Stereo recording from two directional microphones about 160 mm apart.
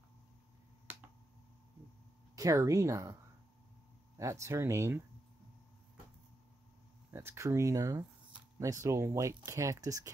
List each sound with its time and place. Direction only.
2.3 s speech: 20° right (ahead or behind)
4.2 s speech: 20° right (ahead or behind)
7.1 s speech: 15° right (ahead or behind)